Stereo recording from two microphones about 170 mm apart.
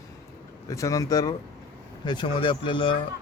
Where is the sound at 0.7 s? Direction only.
20° left (ahead or behind).